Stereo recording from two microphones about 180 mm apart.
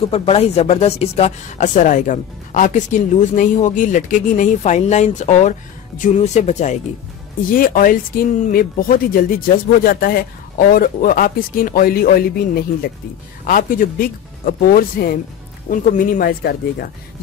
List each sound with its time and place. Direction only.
0.1 s a woman's voice: 35° left (ahead or behind)
7.5 s speech: 50° left (ahead or behind)